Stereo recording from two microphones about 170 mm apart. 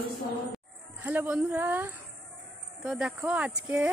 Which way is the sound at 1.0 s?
10° right (ahead or behind).